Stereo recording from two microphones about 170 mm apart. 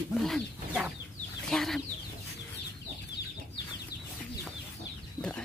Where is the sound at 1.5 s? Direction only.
Centre (ahead or behind).